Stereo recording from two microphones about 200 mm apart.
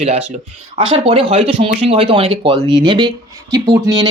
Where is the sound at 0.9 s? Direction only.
30° right (ahead or behind).